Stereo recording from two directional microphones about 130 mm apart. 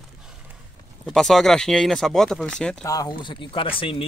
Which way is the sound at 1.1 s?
5° left (ahead or behind).